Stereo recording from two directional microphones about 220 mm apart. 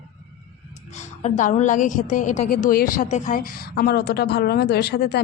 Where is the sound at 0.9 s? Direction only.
30° left (ahead or behind).